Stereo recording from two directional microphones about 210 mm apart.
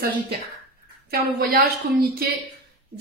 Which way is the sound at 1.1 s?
45° right (ahead or behind).